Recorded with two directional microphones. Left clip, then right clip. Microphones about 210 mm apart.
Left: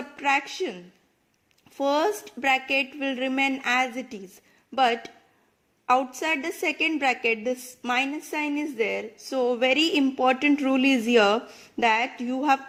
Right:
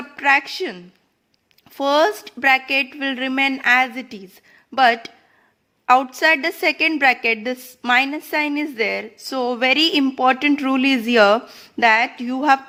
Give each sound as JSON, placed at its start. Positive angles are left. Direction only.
{"t": 0.2, "sound": "a woman's voice", "side_deg": -15}
{"t": 7.5, "sound": "a woman's voice", "side_deg": -25}
{"t": 7.9, "sound": "speech", "side_deg": -15}